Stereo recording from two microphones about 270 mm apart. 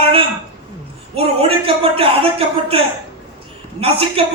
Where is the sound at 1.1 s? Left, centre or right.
Right.